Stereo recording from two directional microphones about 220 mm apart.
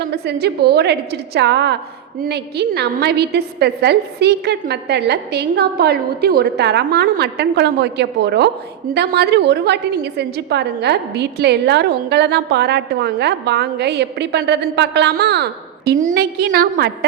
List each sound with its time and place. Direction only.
0.3 s a woman's voice: 50° right (ahead or behind)